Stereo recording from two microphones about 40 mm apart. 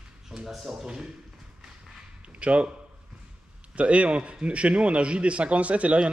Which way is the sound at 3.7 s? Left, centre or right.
Right.